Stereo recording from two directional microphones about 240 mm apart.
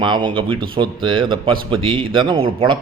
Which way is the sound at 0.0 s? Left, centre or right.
Centre.